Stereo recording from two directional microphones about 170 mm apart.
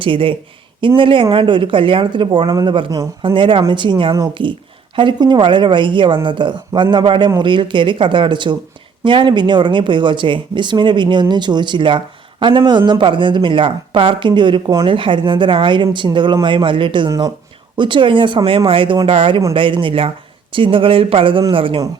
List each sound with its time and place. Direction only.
0.0 s speech: 30° right (ahead or behind)